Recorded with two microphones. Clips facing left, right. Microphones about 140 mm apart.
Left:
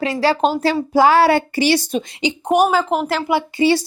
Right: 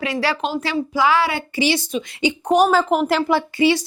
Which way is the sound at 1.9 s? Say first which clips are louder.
Left 3 dB; 45° left (ahead or behind).